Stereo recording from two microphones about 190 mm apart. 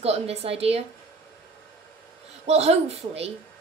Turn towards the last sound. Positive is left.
turn(degrees=-35)  # may be behind; listen again after turning